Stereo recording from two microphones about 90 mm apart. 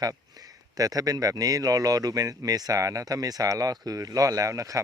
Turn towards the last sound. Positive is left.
turn(degrees=-40)  # may be behind; listen again after turning